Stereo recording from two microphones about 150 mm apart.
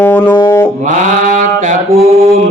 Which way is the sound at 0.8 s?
55° right (ahead or behind).